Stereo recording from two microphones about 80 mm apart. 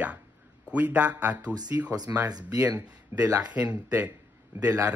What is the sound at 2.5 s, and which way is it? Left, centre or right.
Speech, right.